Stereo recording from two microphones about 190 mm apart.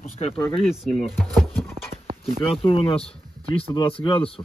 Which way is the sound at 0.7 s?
Centre (ahead or behind).